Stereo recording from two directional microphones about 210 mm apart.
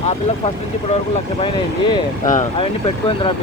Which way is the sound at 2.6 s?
25° left (ahead or behind).